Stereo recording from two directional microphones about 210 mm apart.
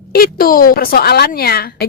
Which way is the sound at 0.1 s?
45° left (ahead or behind).